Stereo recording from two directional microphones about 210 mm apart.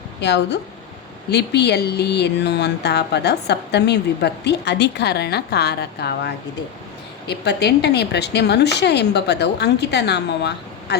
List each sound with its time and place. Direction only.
0.2 s speech: 55° left (ahead or behind)